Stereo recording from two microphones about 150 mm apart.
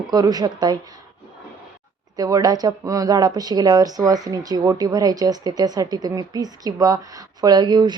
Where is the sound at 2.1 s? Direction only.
25° right (ahead or behind).